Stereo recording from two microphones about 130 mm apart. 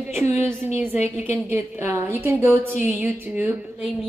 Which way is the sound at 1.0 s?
15° right (ahead or behind).